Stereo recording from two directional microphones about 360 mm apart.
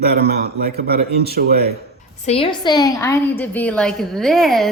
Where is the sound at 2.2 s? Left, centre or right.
Centre.